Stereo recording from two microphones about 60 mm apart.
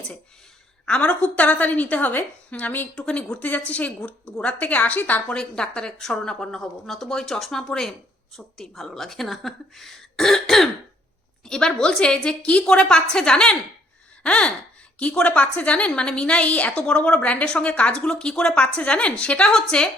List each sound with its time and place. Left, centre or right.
0.9 s a woman's voice: left
3.1 s a woman's voice: centre
3.4 s a woman's voice: left
5.4 s a woman's voice: centre